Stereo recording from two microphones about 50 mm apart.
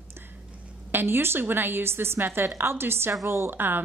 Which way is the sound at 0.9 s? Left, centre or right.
Right.